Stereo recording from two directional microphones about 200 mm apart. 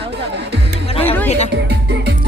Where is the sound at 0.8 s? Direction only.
30° left (ahead or behind).